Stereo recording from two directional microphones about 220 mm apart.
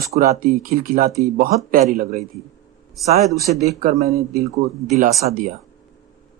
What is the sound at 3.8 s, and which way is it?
Speech, 40° right (ahead or behind).